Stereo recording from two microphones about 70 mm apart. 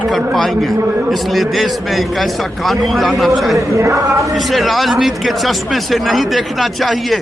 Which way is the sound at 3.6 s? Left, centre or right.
Right.